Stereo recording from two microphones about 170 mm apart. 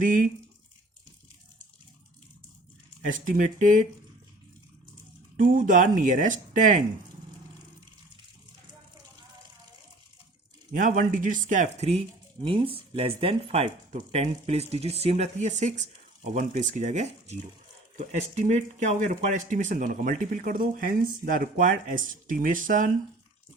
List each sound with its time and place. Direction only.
0.0 s speech: 50° right (ahead or behind)
3.0 s speech: 50° right (ahead or behind)
5.4 s speech: 55° right (ahead or behind)
10.7 s speech: 50° right (ahead or behind)